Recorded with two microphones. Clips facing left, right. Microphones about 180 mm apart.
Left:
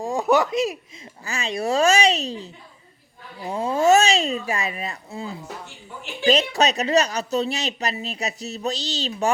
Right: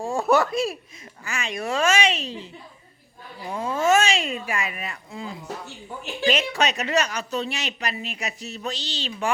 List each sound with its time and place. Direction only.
0.0 s speech: 15° left (ahead or behind)
1.2 s speech: 35° left (ahead or behind)
3.4 s speech: 25° left (ahead or behind)
3.8 s speech: 40° left (ahead or behind)